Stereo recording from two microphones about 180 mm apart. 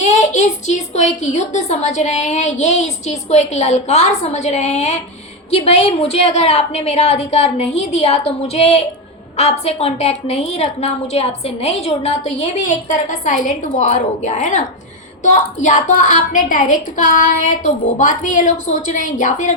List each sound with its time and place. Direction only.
0.0 s a woman's voice: 40° left (ahead or behind)